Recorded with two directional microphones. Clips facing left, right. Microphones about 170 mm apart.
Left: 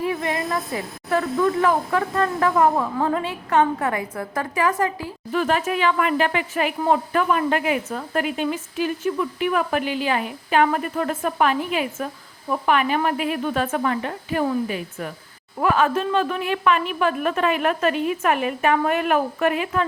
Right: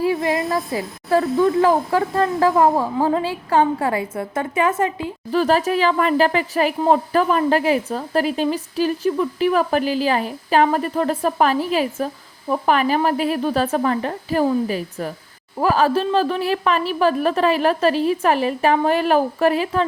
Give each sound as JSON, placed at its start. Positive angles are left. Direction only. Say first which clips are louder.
{"t": 0.0, "sound": "a woman's voice", "louder": "right 5 dB", "side_deg": -30}
{"t": 5.3, "sound": "speech", "louder": "right 4 dB", "side_deg": -35}